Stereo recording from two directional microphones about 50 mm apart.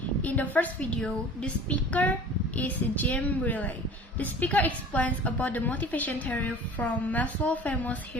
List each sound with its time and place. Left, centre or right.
0.2 s a woman's voice: left